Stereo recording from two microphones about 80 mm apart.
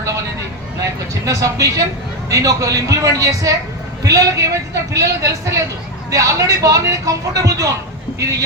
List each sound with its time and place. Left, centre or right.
1.2 s speech: right